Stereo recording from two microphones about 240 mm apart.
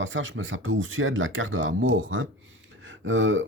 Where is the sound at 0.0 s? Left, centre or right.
Right.